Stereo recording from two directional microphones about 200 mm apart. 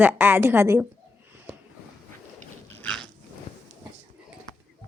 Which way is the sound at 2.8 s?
5° left (ahead or behind).